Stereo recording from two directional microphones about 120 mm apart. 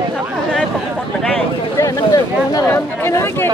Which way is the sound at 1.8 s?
30° left (ahead or behind).